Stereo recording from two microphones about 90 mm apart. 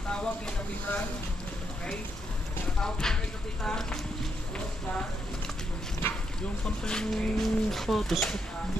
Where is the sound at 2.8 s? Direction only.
5° left (ahead or behind).